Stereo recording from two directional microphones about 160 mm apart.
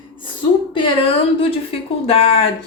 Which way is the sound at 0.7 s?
35° left (ahead or behind).